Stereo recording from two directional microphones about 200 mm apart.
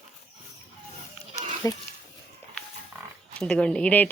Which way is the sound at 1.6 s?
15° left (ahead or behind).